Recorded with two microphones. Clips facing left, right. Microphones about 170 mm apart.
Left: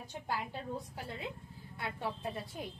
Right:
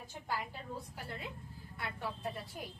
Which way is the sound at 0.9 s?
20° left (ahead or behind).